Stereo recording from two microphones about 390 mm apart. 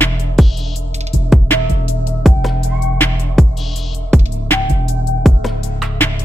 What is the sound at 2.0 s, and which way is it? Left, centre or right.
Music, centre.